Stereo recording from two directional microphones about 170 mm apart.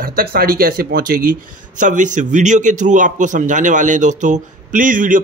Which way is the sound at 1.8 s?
50° right (ahead or behind).